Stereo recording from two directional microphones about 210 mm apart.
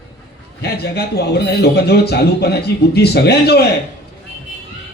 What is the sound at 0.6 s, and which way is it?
A man's voice, 50° left (ahead or behind).